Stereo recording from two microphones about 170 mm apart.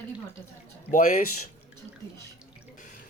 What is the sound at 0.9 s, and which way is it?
Speech, 50° left (ahead or behind).